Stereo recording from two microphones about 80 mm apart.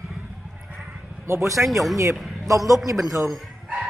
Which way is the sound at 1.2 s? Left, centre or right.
Right.